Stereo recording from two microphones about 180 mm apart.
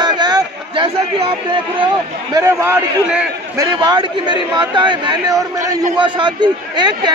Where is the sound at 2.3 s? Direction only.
15° right (ahead or behind).